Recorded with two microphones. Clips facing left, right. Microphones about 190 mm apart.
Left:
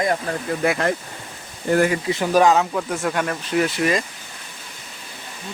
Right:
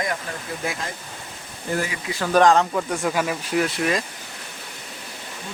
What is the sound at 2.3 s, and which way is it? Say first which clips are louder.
Speech: even; 10° left (ahead or behind).